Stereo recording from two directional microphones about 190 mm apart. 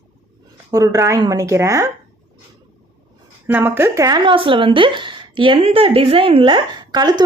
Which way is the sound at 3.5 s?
10° right (ahead or behind).